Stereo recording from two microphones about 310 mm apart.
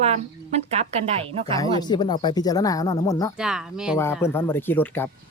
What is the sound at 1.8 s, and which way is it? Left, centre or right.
Speech, centre.